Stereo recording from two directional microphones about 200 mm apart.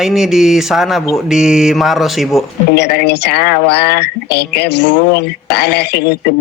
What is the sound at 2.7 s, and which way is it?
Speech, 55° left (ahead or behind).